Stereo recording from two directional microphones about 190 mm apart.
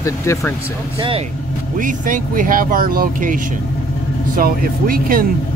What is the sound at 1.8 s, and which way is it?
Speech, 45° right (ahead or behind).